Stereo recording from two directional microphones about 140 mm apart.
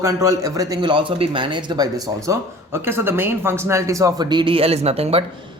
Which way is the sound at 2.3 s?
15° right (ahead or behind).